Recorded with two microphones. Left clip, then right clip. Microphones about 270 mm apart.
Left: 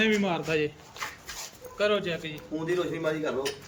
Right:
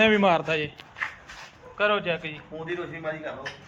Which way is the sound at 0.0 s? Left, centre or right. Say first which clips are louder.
Right 6 dB; centre.